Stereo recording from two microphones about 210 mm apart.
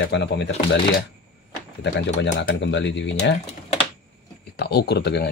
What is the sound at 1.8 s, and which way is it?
Speech, 55° left (ahead or behind).